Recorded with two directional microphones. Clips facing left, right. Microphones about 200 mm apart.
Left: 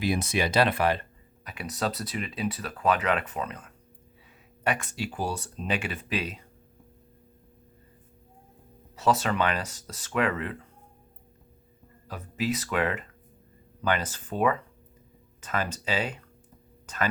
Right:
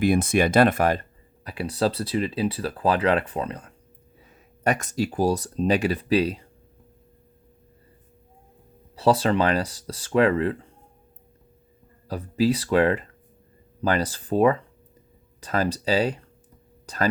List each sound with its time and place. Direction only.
0.0 s speech: 50° right (ahead or behind)
1.5 s speech: 30° right (ahead or behind)
9.0 s speech: 30° right (ahead or behind)
12.0 s speech: 35° right (ahead or behind)
16.8 s a sound: 35° right (ahead or behind)